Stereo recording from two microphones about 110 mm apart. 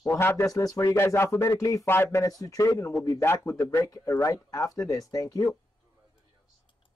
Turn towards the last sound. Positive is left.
turn(degrees=35)  # may be behind; listen again after turning